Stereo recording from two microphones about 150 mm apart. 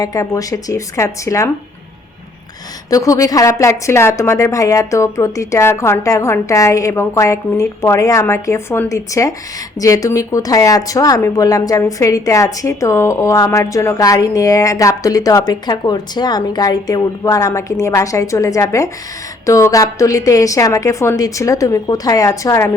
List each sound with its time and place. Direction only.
0.0 s speech: 25° left (ahead or behind)
2.9 s speech: 20° left (ahead or behind)